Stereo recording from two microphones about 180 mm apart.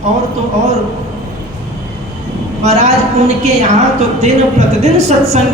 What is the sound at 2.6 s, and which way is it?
A woman's voice, 35° right (ahead or behind).